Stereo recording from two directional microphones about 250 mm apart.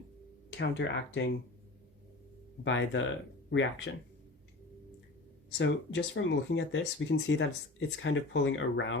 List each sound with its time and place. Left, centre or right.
0.6 s speech: left
2.6 s speech: left
5.5 s speech: left